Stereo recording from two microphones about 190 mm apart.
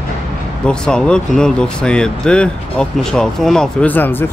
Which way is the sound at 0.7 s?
5° left (ahead or behind).